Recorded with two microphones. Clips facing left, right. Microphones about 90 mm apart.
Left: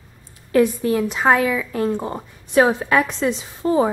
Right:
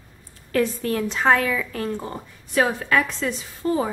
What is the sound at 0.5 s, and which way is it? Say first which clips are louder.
A woman's voice: left 5 dB; 15° left (ahead or behind).